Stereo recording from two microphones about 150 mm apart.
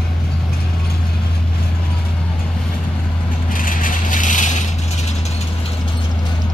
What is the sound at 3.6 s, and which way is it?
Vehicle, 65° left (ahead or behind).